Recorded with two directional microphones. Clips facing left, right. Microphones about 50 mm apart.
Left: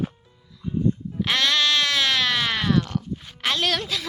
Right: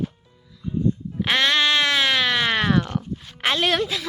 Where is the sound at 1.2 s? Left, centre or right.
Centre.